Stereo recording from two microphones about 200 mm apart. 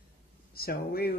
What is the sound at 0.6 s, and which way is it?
Speech, 50° left (ahead or behind).